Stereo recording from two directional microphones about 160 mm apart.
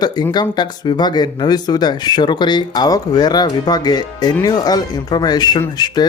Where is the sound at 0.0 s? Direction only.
25° left (ahead or behind).